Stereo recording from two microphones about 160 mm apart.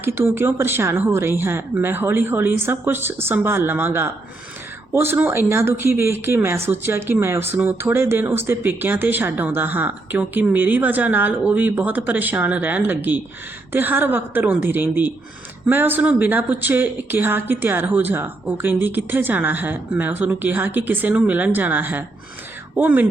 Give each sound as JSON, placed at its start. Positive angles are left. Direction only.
{"t": 0.0, "sound": "speech", "side_deg": -15}